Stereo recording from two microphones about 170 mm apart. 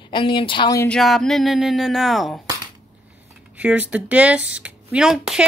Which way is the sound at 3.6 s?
10° right (ahead or behind).